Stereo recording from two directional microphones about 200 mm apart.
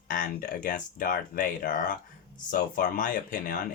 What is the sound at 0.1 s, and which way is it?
Speech, 45° left (ahead or behind).